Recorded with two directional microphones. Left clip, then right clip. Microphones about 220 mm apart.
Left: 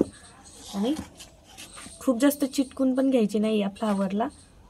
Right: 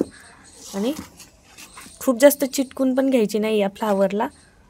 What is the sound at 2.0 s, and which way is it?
Speech, 45° right (ahead or behind).